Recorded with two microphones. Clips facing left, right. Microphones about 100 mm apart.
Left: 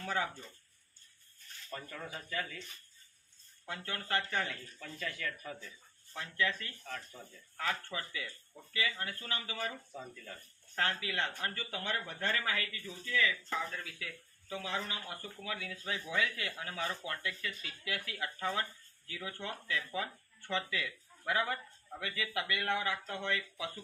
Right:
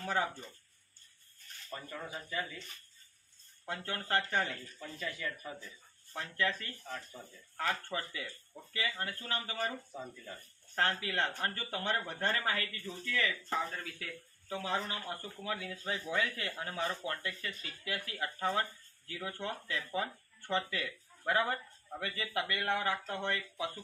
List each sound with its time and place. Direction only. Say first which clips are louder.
0.0 s speech: right 2 dB; 30° right (ahead or behind)
1.7 s speech: right 1 dB; 15° right (ahead or behind)
3.7 s speech: right 2 dB; 35° right (ahead or behind)
4.8 s speech: even; 15° right (ahead or behind)
6.1 s speech: right 1 dB; 35° right (ahead or behind)
6.8 s speech: right 1 dB; 10° right (ahead or behind)
7.5 s speech: right 2 dB; 35° right (ahead or behind)
9.9 s speech: right 2 dB; 10° right (ahead or behind)
10.8 s speech: right 2 dB; 35° right (ahead or behind)